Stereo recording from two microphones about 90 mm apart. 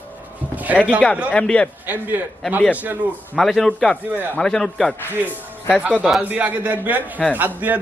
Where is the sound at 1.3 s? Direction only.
10° left (ahead or behind).